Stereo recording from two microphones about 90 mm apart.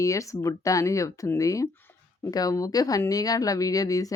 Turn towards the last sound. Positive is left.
turn(degrees=40)  # may be behind; listen again after turning